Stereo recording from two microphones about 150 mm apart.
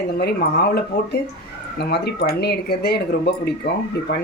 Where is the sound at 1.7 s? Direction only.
90° left.